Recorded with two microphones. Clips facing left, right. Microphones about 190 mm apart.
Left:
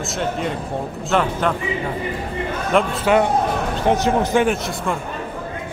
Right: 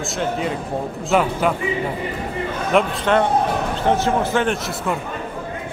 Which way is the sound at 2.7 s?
5° left (ahead or behind).